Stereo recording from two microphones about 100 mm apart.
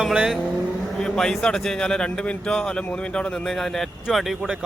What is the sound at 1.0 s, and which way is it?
A man's voice, 5° left (ahead or behind).